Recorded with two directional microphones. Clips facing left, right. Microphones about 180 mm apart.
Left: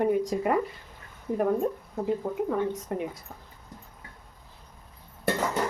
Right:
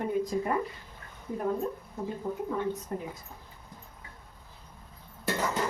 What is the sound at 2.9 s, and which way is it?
Speech, 75° left (ahead or behind).